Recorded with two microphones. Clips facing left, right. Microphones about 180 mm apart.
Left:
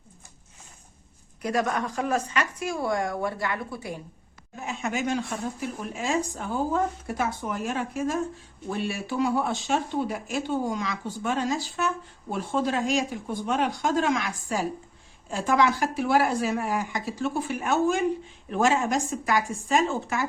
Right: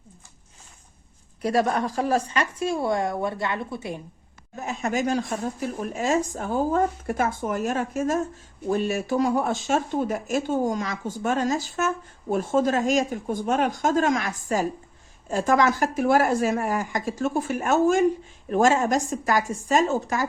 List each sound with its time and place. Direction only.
1.4 s speech: 30° right (ahead or behind)
4.5 s speech: 40° right (ahead or behind)